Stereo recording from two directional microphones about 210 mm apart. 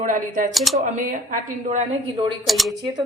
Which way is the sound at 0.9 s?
35° right (ahead or behind).